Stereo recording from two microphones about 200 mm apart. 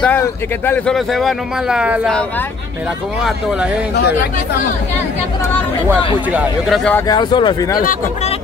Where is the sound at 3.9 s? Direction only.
55° left (ahead or behind).